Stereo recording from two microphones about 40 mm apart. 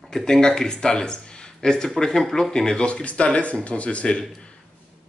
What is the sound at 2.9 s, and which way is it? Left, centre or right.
Speech, left.